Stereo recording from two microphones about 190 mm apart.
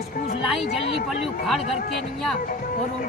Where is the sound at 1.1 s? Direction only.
Centre (ahead or behind).